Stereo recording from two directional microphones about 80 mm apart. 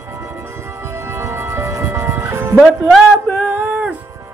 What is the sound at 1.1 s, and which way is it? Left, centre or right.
Music, right.